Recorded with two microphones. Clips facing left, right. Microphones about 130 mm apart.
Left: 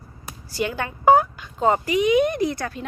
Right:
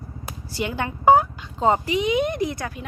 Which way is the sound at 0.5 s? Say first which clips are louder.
Left 1 dB; 20° right (ahead or behind).